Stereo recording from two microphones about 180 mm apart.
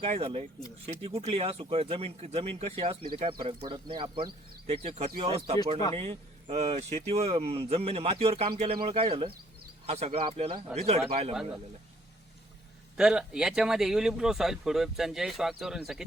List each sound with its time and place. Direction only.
0.0 s speech: 30° right (ahead or behind)
13.0 s speech: 5° right (ahead or behind)